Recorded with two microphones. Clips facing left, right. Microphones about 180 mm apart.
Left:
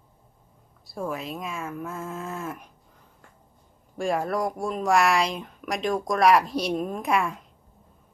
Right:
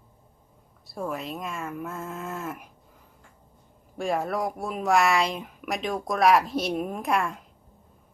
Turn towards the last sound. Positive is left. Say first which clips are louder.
# left 1 dB
turn(degrees=0)  # may be behind; listen again after turning